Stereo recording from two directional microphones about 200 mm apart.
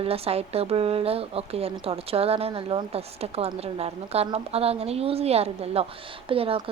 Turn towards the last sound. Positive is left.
turn(degrees=-30)  # may be behind; listen again after turning